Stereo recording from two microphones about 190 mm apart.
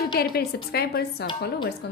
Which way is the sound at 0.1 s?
55° left (ahead or behind).